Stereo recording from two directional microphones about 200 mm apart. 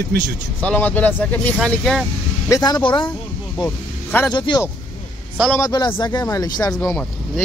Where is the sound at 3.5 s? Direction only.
5° left (ahead or behind).